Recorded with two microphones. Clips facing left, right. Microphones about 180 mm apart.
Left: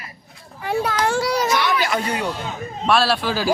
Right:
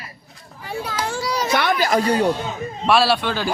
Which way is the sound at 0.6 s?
65° left (ahead or behind).